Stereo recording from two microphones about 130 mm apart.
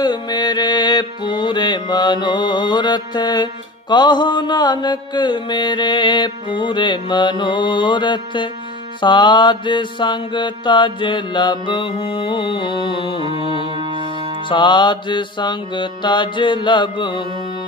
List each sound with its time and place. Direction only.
0.0 s mantra: 35° left (ahead or behind)
13.7 s music: 40° right (ahead or behind)
14.5 s mantra: 35° left (ahead or behind)